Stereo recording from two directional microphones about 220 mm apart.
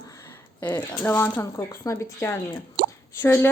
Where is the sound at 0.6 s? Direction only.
10° left (ahead or behind).